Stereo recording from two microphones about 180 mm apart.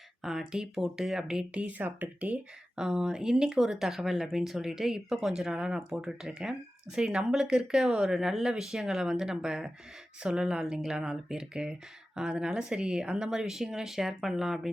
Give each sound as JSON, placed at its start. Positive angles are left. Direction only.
{"t": 0.2, "sound": "speech", "side_deg": 0}